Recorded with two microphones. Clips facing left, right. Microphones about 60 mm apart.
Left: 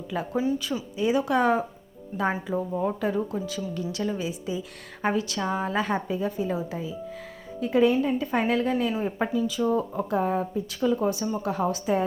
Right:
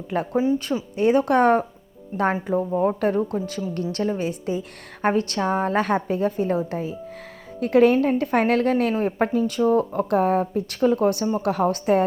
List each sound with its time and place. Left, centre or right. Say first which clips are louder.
0.1 s a woman's voice: right 5 dB; right
3.9 s a woman's voice: right 5 dB; right
4.2 s a woman's voice: right 5 dB; right